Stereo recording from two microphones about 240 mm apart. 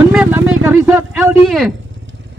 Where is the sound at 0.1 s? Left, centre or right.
Centre.